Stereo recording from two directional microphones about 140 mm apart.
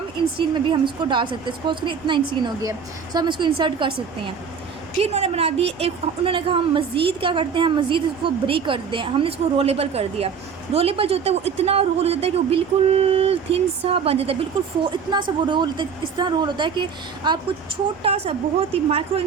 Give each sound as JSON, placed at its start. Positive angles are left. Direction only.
{"t": 0.3, "sound": "a woman's voice", "side_deg": -35}
{"t": 4.9, "sound": "a woman's voice", "side_deg": -45}
{"t": 15.4, "sound": "a woman's voice", "side_deg": -35}